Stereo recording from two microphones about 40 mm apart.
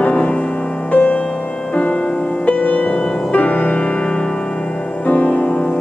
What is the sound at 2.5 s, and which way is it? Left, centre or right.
Music, left.